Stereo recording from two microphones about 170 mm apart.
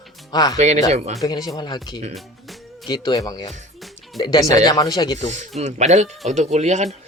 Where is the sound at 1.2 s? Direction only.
25° left (ahead or behind).